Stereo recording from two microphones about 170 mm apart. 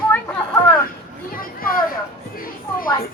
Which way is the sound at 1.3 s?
60° left (ahead or behind).